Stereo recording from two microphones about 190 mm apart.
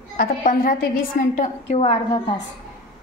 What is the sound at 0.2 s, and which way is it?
A woman's voice, 45° left (ahead or behind).